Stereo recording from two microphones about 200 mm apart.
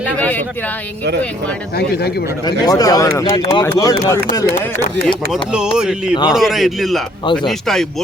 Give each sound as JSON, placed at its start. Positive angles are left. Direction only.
{"t": 0.2, "sound": "speech", "side_deg": 10}
{"t": 1.7, "sound": "speech", "side_deg": 55}
{"t": 2.4, "sound": "speech", "side_deg": 20}
{"t": 5.0, "sound": "a man's voice", "side_deg": 0}